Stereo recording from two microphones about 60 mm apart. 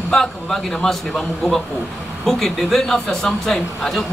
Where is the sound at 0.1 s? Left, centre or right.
Centre.